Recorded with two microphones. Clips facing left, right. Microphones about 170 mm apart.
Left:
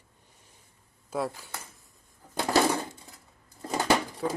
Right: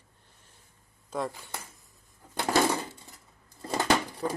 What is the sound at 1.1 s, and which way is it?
Speech, 5° left (ahead or behind).